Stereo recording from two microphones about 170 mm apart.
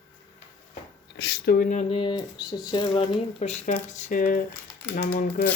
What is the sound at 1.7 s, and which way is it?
Speech, 40° left (ahead or behind).